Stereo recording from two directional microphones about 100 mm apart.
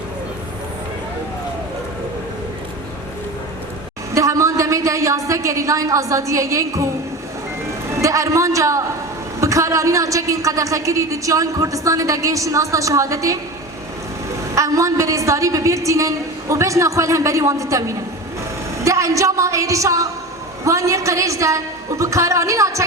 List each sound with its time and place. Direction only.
4.1 s a woman's voice: 30° right (ahead or behind)
8.0 s a man's voice: 30° right (ahead or behind)
14.5 s a woman's voice: 30° right (ahead or behind)